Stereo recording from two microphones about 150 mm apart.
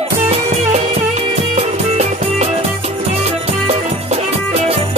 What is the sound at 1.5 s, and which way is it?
Music, 45° right (ahead or behind).